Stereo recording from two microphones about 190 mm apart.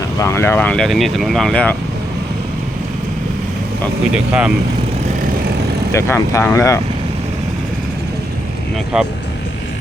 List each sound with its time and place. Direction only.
0.2 s speech: 15° left (ahead or behind)
4.1 s speech: 5° right (ahead or behind)
5.9 s speech: 15° left (ahead or behind)
8.9 s speech: 5° right (ahead or behind)